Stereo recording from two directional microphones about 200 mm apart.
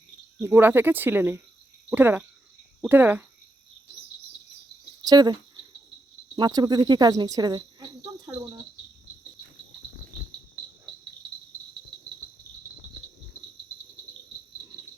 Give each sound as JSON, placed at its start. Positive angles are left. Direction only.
{"t": 0.3, "sound": "speech", "side_deg": -10}
{"t": 5.0, "sound": "speech", "side_deg": -20}